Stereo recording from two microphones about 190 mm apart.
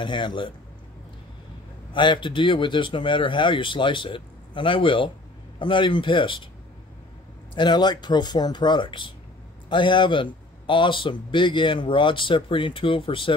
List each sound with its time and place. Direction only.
0.0 s speech: 25° left (ahead or behind)
1.9 s speech: 25° left (ahead or behind)
7.5 s speech: 20° left (ahead or behind)